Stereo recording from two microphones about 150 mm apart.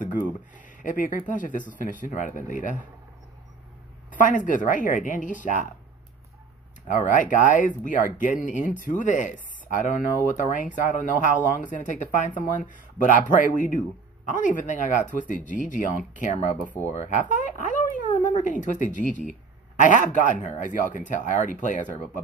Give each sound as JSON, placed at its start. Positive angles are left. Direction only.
{"t": 0.8, "sound": "speech", "side_deg": 60}
{"t": 4.1, "sound": "speech", "side_deg": 60}
{"t": 6.9, "sound": "speech", "side_deg": 60}